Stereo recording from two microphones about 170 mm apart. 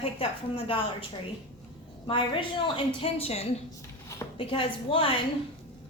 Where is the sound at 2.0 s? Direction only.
30° left (ahead or behind).